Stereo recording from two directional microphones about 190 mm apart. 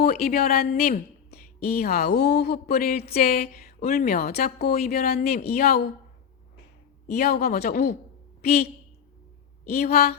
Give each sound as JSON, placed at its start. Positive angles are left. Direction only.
{"t": 0.0, "sound": "speech", "side_deg": 50}
{"t": 7.1, "sound": "speech", "side_deg": 55}
{"t": 9.6, "sound": "speech", "side_deg": 55}